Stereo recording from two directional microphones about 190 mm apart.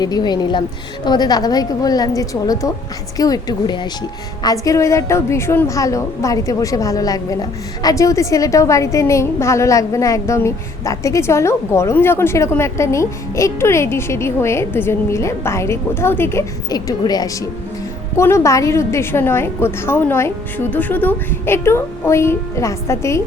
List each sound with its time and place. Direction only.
0.0 s a woman's voice: 20° left (ahead or behind)